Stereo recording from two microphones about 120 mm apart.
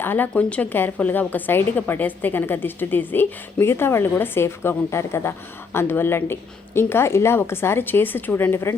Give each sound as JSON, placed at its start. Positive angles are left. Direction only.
{"t": 0.0, "sound": "a woman's voice", "side_deg": 15}